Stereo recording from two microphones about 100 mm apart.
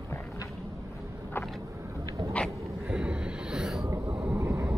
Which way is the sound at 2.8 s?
10° right (ahead or behind).